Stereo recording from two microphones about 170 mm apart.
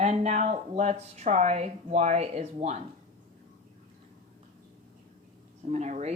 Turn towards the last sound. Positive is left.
turn(degrees=-40)  # may be behind; listen again after turning